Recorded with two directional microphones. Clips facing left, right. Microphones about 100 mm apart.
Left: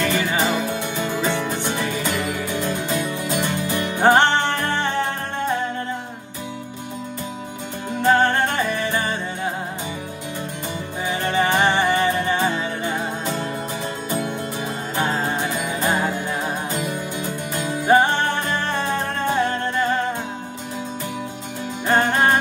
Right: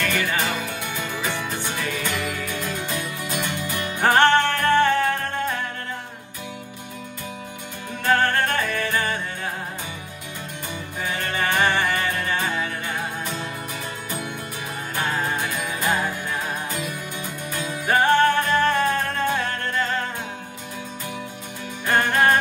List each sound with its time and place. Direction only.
0.0 s music: 20° left (ahead or behind)
8.0 s music: 20° left (ahead or behind)
11.0 s music: 20° left (ahead or behind)
15.0 s music: 20° left (ahead or behind)
17.6 s music: 20° left (ahead or behind)
21.8 s music: 20° left (ahead or behind)